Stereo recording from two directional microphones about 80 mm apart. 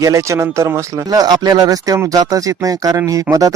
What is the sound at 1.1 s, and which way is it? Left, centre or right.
Speech, right.